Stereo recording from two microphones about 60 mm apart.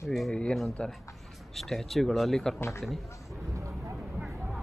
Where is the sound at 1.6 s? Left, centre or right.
Centre.